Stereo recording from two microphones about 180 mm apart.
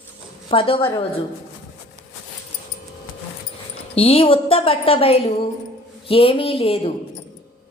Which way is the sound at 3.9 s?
30° left (ahead or behind).